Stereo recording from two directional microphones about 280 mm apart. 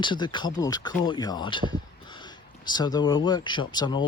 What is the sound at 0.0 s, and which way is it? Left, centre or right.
Speech, centre.